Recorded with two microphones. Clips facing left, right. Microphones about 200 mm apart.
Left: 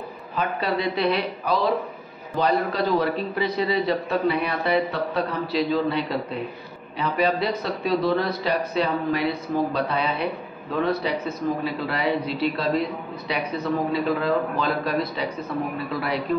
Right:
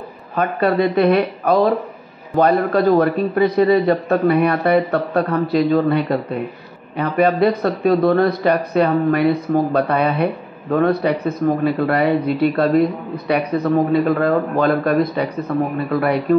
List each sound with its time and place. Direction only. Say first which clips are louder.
0.3 s a man's voice: right 8 dB; 55° right (ahead or behind)